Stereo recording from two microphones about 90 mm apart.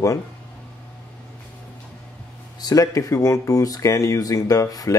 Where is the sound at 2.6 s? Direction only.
45° left (ahead or behind).